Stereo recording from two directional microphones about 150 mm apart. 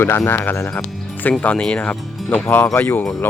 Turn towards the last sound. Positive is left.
turn(degrees=10)  # may be behind; listen again after turning